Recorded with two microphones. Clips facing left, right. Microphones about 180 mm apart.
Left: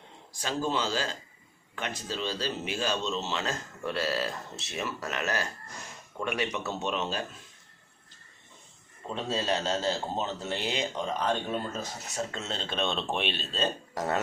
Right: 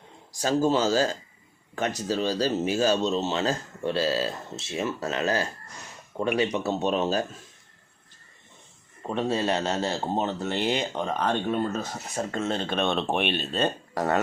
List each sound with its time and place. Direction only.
0.4 s speech: 40° right (ahead or behind)
9.0 s speech: 60° right (ahead or behind)